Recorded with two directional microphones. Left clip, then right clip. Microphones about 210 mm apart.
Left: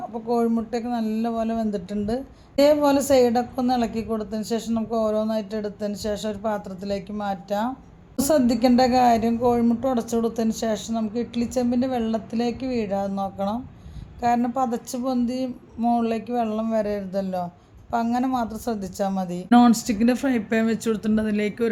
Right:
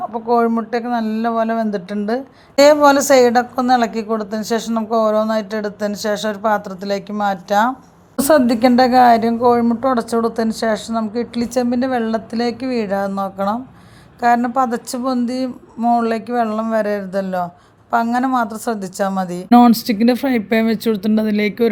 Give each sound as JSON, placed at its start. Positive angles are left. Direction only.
{"t": 0.1, "sound": "a woman's voice", "side_deg": -5}